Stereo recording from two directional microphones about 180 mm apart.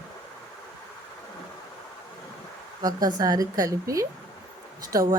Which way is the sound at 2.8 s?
20° right (ahead or behind).